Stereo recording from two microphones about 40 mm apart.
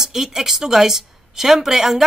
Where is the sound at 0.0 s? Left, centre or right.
Centre.